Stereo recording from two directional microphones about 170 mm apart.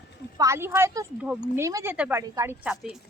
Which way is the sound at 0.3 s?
15° right (ahead or behind).